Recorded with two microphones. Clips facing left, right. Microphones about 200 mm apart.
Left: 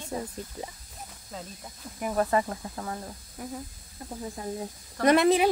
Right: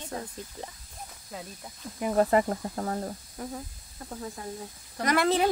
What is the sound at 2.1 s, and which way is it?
Speech, 30° right (ahead or behind).